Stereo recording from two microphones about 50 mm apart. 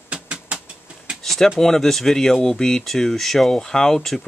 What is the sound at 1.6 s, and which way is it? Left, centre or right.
Speech, centre.